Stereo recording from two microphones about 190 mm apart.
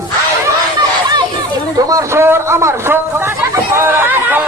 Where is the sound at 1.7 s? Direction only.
15° right (ahead or behind).